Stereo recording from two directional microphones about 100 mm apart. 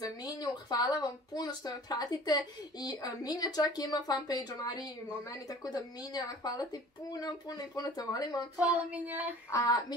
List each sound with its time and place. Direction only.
0.4 s speech: 45° left (ahead or behind)
8.5 s child singing: 15° right (ahead or behind)
9.5 s speech: 40° left (ahead or behind)